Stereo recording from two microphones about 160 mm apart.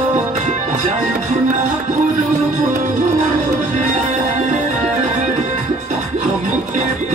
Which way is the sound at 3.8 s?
45° right (ahead or behind).